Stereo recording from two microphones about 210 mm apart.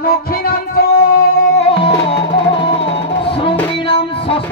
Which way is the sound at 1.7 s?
25° left (ahead or behind).